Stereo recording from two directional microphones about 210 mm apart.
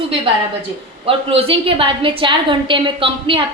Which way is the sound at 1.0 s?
25° right (ahead or behind).